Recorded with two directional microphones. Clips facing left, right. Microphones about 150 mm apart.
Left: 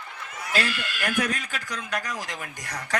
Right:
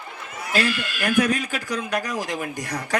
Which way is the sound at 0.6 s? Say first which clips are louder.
Right 5 dB; 15° right (ahead or behind).